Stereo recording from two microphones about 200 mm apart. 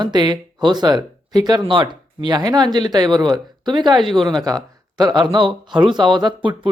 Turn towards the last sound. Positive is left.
turn(degrees=-25)  # may be behind; listen again after turning